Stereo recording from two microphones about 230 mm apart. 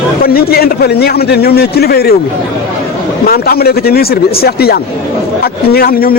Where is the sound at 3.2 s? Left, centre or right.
Left.